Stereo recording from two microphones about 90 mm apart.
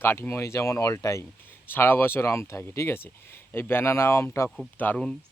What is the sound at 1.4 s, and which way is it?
Speech, 25° left (ahead or behind).